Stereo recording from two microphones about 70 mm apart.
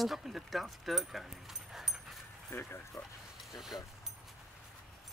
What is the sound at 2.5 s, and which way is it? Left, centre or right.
Speech, left.